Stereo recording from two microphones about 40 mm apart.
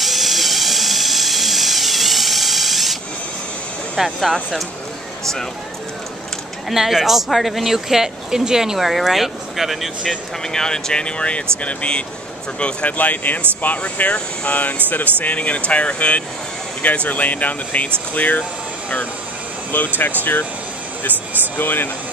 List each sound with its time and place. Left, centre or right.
0.0 s dental drill: centre
4.0 s speech: centre
5.2 s speech: centre
6.7 s speech: centre
10.4 s speech: centre
12.9 s speech: left
21.5 s speech: left